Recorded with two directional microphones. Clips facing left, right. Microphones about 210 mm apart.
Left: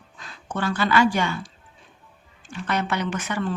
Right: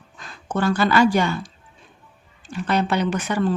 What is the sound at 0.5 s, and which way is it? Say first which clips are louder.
Speech: right 3 dB; 40° right (ahead or behind).